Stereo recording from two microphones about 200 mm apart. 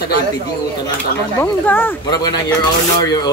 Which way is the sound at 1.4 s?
10° left (ahead or behind).